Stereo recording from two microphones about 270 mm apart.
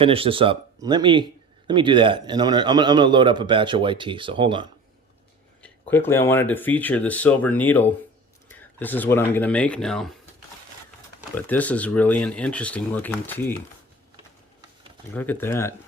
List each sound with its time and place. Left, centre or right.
0.0 s a man's voice: centre
5.6 s speech: centre
11.3 s speech: centre
15.1 s speech: centre